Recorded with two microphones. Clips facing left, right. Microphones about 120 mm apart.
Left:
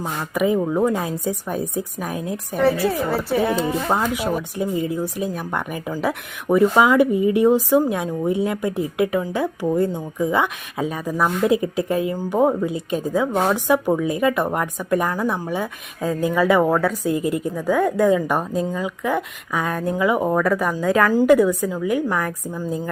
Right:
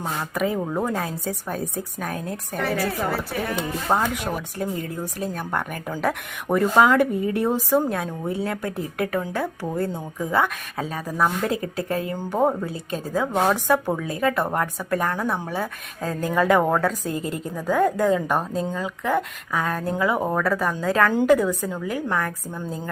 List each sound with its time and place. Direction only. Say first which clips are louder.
0.0 s a woman's voice: left 4 dB; 15° left (ahead or behind)
0.6 s speech: left 5 dB; 5° left (ahead or behind)
1.0 s a woman's voice: left 4 dB; 15° left (ahead or behind)
2.6 s speech: left 5 dB; 25° left (ahead or behind)
4.5 s a woman's voice: left 5 dB; 10° left (ahead or behind)